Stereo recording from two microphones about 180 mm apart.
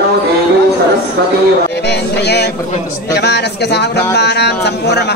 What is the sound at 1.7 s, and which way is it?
Music, 70° left (ahead or behind).